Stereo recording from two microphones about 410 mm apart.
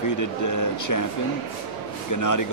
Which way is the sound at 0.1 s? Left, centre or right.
Left.